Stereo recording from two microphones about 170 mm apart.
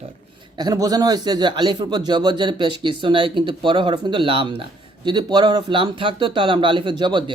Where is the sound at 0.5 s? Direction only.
25° right (ahead or behind).